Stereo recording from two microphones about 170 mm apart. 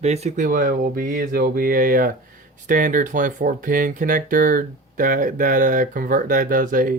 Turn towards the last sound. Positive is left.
turn(degrees=-50)  # may be behind; listen again after turning